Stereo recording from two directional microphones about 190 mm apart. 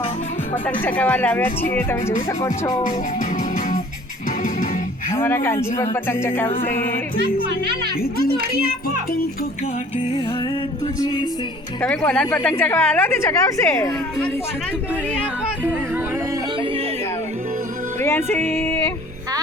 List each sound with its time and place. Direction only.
0.9 s a woman's voice: 10° left (ahead or behind)
2.4 s music: 20° left (ahead or behind)
4.4 s music: 45° left (ahead or behind)
5.1 s a woman's voice: 15° left (ahead or behind)
6.6 s music: 45° left (ahead or behind)
11.0 s music: 20° left (ahead or behind)
11.8 s a woman's voice: 5° left (ahead or behind)
18.3 s a woman's voice: 10° left (ahead or behind)